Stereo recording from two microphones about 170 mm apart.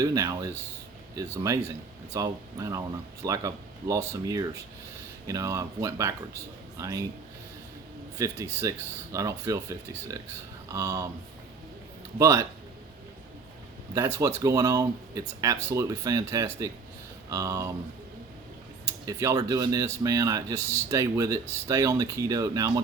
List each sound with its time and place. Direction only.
0.0 s speech: 20° right (ahead or behind)
2.1 s speech: 20° right (ahead or behind)
8.2 s speech: 15° right (ahead or behind)
12.2 s speech: 15° right (ahead or behind)
13.9 s speech: 15° right (ahead or behind)
19.0 s speech: 20° right (ahead or behind)